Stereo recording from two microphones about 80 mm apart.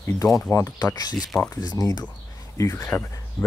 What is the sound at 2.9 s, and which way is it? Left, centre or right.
Speech, centre.